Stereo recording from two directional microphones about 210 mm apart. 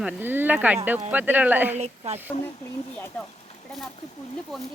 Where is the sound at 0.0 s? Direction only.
5° right (ahead or behind).